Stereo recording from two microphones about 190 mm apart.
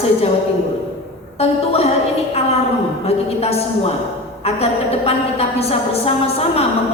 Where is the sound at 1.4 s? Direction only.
35° left (ahead or behind).